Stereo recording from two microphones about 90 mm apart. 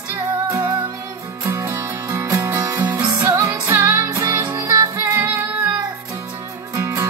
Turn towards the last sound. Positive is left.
turn(degrees=-30)  # may be behind; listen again after turning